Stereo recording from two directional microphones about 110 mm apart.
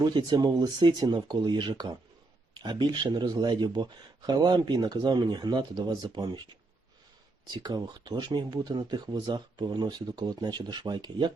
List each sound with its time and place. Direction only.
0.0 s speech: 40° right (ahead or behind)
7.5 s speech: 40° right (ahead or behind)